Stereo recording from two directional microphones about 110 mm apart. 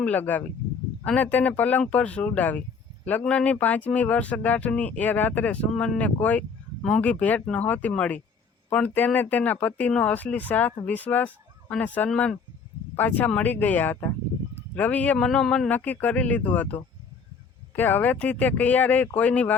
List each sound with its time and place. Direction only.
0.0 s speech: 15° left (ahead or behind)